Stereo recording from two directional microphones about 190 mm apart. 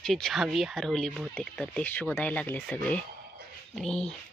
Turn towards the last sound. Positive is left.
turn(degrees=5)  # may be behind; listen again after turning